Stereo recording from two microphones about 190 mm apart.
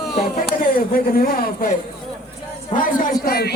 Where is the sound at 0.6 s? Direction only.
50° left (ahead or behind).